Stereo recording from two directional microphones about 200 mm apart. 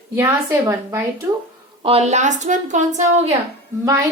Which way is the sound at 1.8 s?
30° right (ahead or behind).